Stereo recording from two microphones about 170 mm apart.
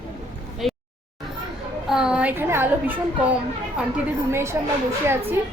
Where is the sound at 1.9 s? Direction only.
5° right (ahead or behind).